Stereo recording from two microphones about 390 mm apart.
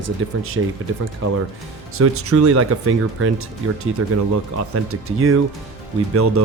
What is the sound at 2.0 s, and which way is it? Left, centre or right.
Speech, right.